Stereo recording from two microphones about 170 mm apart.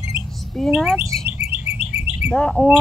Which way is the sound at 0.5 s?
Centre (ahead or behind).